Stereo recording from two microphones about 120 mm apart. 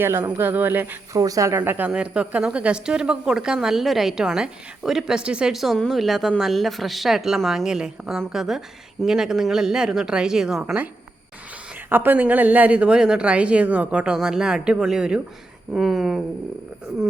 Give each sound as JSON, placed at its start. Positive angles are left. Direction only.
{"t": 0.0, "sound": "a woman's voice", "side_deg": -20}
{"t": 1.1, "sound": "a woman's voice", "side_deg": -30}
{"t": 11.9, "sound": "a woman's voice", "side_deg": -15}